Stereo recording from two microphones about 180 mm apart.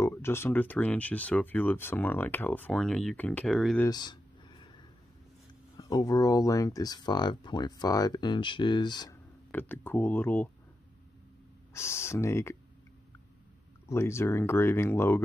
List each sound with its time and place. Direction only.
0.0 s speech: 15° left (ahead or behind)
3.8 s a sound: 25° left (ahead or behind)
5.8 s speech: 20° left (ahead or behind)
9.5 s speech: 10° left (ahead or behind)
11.7 s speech: 15° left (ahead or behind)
13.8 s speech: 15° left (ahead or behind)